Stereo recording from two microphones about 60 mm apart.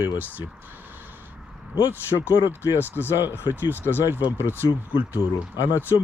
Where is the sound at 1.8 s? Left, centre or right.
Right.